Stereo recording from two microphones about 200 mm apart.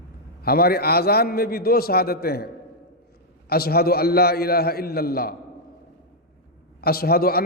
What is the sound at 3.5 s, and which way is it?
A man's voice, 50° left (ahead or behind).